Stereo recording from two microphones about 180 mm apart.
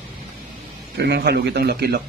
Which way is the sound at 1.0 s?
65° right (ahead or behind).